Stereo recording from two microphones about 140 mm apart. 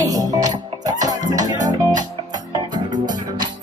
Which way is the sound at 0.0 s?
25° right (ahead or behind).